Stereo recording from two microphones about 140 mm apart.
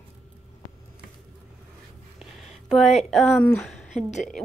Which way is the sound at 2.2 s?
Centre (ahead or behind).